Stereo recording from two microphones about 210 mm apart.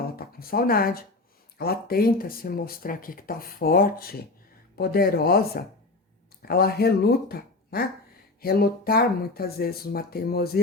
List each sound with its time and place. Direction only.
0.2 s speech: 45° left (ahead or behind)